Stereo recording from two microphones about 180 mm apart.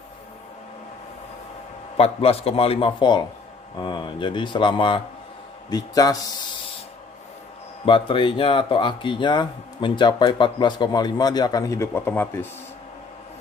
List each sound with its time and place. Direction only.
2.0 s a man's voice: 35° left (ahead or behind)
7.8 s speech: 30° left (ahead or behind); by 12.4 s 10° left (ahead or behind)